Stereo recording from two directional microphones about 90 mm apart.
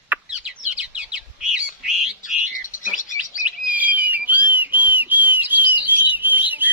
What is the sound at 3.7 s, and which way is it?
Whistle, 20° right (ahead or behind).